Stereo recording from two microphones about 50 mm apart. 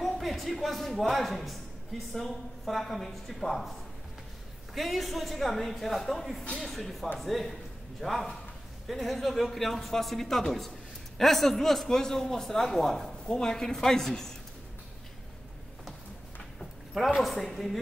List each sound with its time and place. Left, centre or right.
0.0 s a woman's voice: centre
4.7 s a man's voice: centre
16.9 s speech: centre